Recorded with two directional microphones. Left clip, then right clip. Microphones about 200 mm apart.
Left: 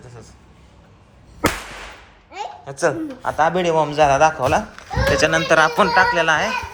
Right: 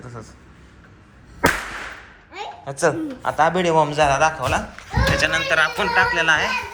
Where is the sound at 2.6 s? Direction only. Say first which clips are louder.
Even; 15° left (ahead or behind).